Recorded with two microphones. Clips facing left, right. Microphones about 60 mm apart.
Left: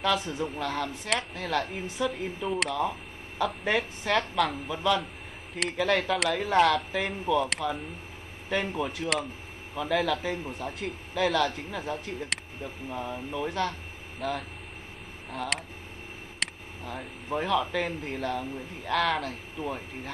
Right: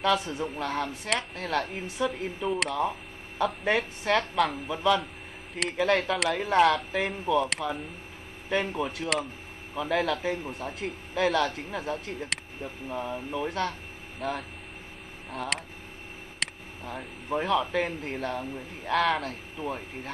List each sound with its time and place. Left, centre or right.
0.0 s speech: centre
2.7 s speech: centre
18.1 s speech: centre